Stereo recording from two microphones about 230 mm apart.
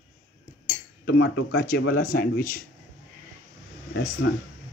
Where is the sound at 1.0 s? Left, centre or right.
Left.